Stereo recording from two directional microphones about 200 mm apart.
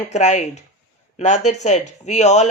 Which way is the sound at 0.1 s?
35° left (ahead or behind).